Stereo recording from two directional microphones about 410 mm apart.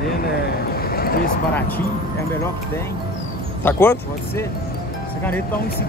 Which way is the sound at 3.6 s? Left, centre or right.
Centre.